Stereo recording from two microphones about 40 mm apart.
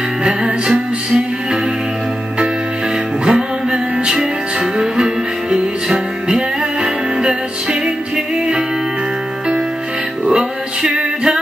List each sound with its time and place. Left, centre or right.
0.2 s music: centre
3.3 s music: right
10.2 s male singing: right